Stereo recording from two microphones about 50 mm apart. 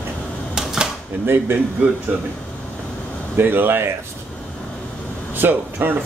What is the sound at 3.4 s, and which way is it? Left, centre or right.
Speech, right.